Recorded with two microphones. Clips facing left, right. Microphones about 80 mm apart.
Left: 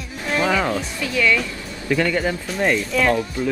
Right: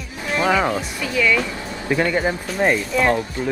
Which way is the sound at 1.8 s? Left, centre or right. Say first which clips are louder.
Right 1 dB; right.